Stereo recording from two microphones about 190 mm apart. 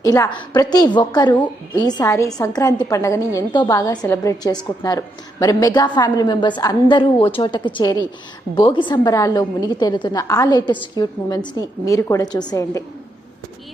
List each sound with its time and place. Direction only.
0.0 s a woman's voice: 20° left (ahead or behind)